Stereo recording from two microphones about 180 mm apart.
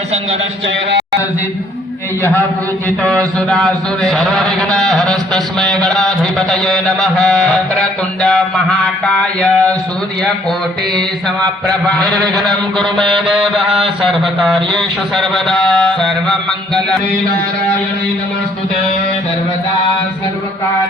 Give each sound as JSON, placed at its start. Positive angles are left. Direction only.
{"t": 3.3, "sound": "music", "side_deg": 5}
{"t": 11.7, "sound": "music", "side_deg": 5}
{"t": 12.0, "sound": "a man's voice", "side_deg": -20}
{"t": 12.7, "sound": "music", "side_deg": 5}
{"t": 14.1, "sound": "music", "side_deg": 0}